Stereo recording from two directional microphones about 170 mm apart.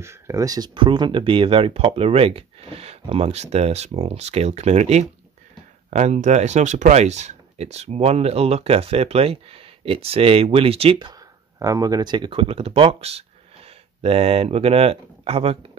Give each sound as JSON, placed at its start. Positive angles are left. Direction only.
{"t": 0.0, "sound": "speech", "side_deg": -15}